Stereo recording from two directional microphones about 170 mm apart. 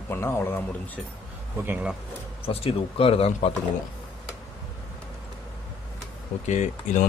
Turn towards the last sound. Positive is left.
turn(degrees=45)  # may be behind; listen again after turning